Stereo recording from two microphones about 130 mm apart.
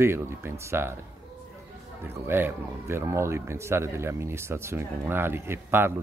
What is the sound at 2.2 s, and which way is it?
Speech, 15° right (ahead or behind).